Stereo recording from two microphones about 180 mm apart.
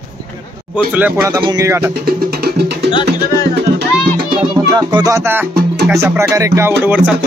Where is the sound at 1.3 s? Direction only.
20° right (ahead or behind).